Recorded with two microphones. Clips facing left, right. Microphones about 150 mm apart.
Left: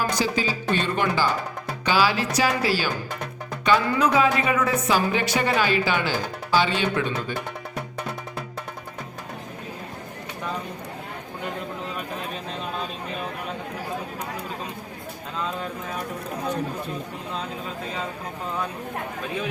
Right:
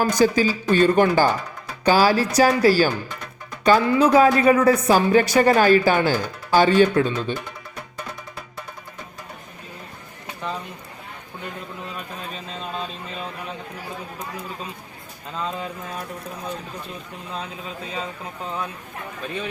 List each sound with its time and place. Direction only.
0.0 s a woman's voice: 45° right (ahead or behind)